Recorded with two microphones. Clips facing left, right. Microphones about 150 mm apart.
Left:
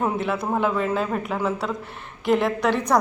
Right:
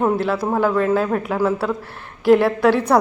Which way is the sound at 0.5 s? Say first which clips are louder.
Right 5 dB; centre (ahead or behind).